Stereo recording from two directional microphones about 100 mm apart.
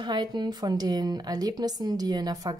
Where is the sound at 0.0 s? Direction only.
45° right (ahead or behind).